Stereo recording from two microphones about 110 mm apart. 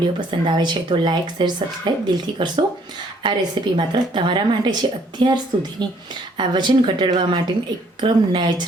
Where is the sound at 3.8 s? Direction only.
45° right (ahead or behind).